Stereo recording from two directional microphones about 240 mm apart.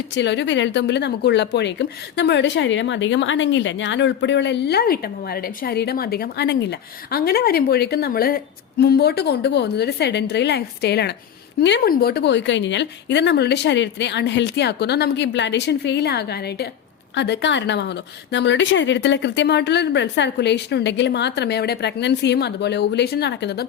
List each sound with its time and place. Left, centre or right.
0.2 s speech: left